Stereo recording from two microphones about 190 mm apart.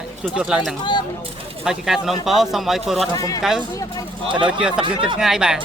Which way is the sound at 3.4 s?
Centre (ahead or behind).